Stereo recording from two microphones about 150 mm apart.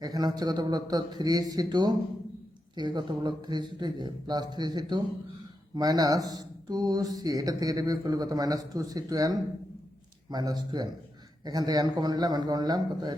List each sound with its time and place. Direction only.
0.0 s speech: 25° right (ahead or behind)